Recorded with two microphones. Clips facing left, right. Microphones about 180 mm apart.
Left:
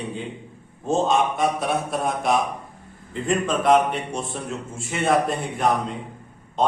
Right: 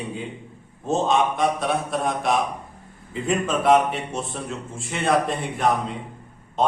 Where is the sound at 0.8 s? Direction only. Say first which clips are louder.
Even; centre (ahead or behind).